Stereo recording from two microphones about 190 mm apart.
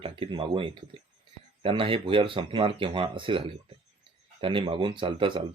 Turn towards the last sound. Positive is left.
turn(degrees=-25)  # may be behind; listen again after turning